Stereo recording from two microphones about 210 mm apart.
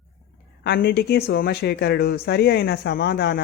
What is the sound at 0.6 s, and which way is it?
Speech, 55° left (ahead or behind).